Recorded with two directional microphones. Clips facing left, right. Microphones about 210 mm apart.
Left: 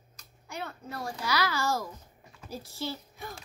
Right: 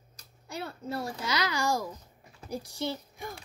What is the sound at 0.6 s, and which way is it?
A child's voice, 30° right (ahead or behind).